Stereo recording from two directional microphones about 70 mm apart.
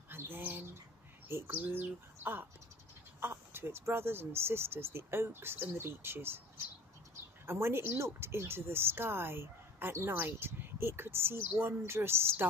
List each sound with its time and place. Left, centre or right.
0.1 s bird: right
3.2 s speech: right
7.4 s speech: right